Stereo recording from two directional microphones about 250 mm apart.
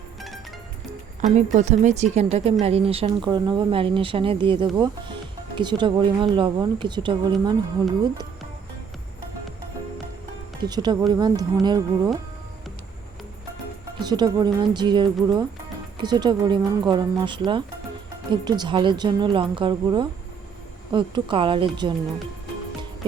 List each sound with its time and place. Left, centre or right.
1.2 s speech: right
10.6 s speech: centre
14.0 s speech: centre